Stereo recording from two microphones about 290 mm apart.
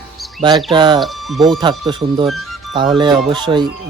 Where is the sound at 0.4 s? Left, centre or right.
Centre.